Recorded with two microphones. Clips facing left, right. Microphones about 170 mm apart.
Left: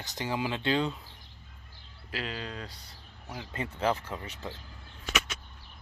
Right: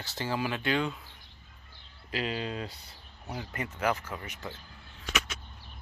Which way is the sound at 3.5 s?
30° left (ahead or behind).